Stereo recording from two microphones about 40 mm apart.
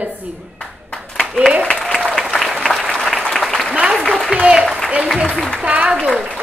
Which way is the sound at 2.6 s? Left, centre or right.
Centre.